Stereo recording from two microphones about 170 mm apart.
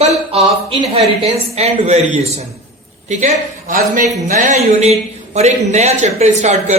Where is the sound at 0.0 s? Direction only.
40° right (ahead or behind).